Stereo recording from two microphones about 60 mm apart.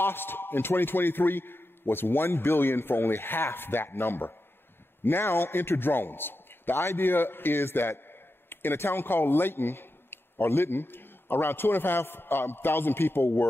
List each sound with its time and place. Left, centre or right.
0.0 s a man's voice: left